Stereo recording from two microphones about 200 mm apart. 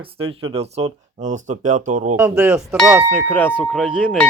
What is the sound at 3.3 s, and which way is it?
Speech, 10° left (ahead or behind).